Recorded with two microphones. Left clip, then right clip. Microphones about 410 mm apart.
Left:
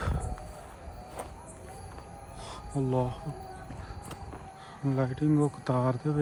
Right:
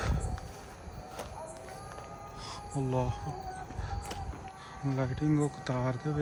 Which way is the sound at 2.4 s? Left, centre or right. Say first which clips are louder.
Left 3 dB; centre.